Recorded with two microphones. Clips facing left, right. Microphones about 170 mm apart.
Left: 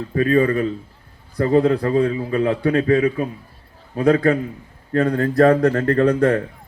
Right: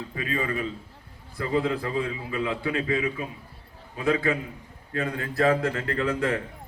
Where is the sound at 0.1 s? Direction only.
45° left (ahead or behind).